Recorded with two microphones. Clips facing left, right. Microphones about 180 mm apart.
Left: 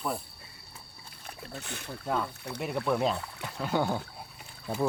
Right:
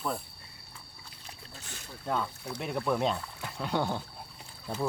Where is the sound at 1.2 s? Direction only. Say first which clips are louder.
Left 8 dB; 55° left (ahead or behind).